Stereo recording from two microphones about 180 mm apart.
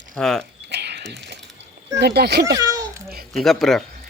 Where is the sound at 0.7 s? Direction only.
65° right (ahead or behind).